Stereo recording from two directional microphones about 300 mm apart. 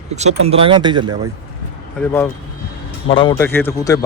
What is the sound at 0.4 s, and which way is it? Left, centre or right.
Speech, centre.